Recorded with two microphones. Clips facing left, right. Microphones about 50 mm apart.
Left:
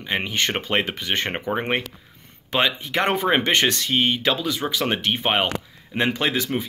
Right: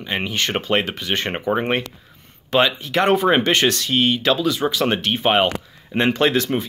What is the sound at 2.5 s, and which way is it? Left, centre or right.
Speech, left.